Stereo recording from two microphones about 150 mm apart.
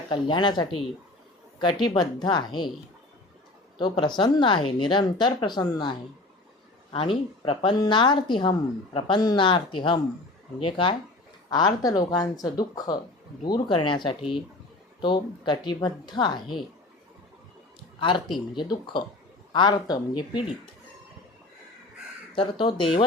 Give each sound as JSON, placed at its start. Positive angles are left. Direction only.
{"t": 0.1, "sound": "a woman's voice", "side_deg": 30}
{"t": 3.8, "sound": "a woman's voice", "side_deg": 30}
{"t": 18.5, "sound": "a woman's voice", "side_deg": 30}
{"t": 22.4, "sound": "a woman's voice", "side_deg": 30}